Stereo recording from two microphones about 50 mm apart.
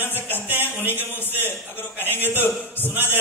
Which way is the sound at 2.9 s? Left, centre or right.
Right.